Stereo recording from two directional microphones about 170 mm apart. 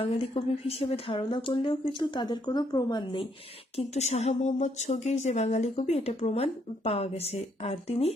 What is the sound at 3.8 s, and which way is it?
A woman's voice, 40° left (ahead or behind).